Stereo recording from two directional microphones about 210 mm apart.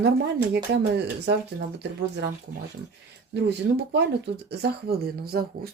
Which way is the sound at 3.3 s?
55° right (ahead or behind).